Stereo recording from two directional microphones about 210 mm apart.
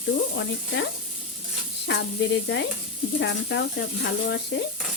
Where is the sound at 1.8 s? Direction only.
55° left (ahead or behind).